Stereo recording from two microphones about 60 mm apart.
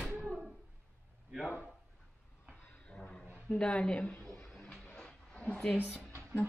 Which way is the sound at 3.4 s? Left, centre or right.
Centre.